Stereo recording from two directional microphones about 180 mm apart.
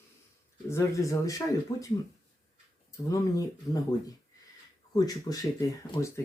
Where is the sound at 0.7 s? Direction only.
15° left (ahead or behind).